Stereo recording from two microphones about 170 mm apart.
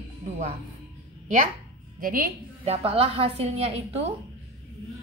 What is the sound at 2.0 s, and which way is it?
Speech, 55° right (ahead or behind).